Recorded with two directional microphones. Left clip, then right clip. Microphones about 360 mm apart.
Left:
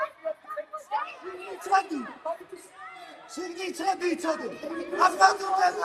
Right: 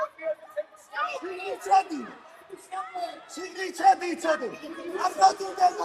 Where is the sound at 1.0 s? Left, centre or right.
Right.